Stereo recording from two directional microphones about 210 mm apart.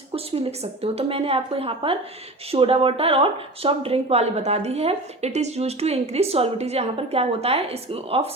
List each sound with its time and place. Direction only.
0.1 s speech: 30° right (ahead or behind)